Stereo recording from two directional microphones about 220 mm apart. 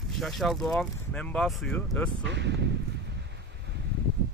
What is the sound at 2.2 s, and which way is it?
Speech, 50° right (ahead or behind).